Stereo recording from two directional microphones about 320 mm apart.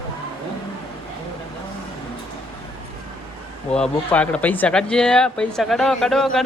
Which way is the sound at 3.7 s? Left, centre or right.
Centre.